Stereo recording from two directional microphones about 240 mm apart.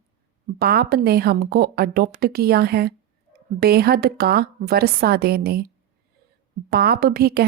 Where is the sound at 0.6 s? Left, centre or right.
Right.